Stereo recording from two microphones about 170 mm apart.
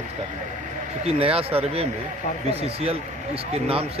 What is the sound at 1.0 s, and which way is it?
Speech, 35° right (ahead or behind).